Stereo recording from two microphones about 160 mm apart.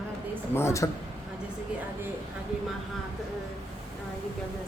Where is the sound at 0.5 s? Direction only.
15° left (ahead or behind).